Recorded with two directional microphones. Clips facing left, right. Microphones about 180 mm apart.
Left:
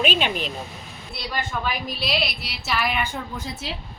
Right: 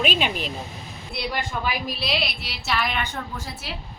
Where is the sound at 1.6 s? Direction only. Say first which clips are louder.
Even; centre (ahead or behind).